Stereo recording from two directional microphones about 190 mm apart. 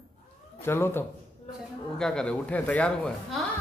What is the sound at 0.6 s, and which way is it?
A woman's voice, 10° left (ahead or behind).